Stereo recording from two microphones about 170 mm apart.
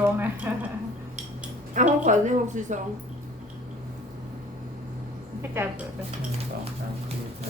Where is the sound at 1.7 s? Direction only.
45° right (ahead or behind).